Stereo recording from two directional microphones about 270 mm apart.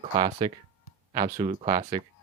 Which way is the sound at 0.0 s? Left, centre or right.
Right.